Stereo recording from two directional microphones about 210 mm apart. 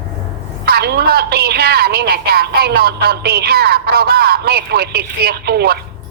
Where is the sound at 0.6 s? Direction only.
50° right (ahead or behind).